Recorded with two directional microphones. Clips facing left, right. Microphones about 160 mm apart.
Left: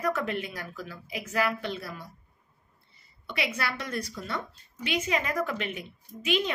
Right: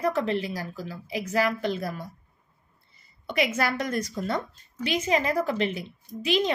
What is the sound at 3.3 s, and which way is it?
A woman's voice, 45° right (ahead or behind).